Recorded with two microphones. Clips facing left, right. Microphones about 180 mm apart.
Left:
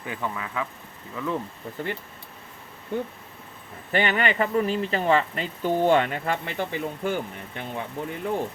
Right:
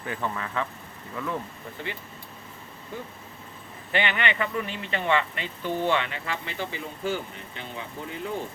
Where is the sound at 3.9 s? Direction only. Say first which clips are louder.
Left 3 dB; 40° left (ahead or behind).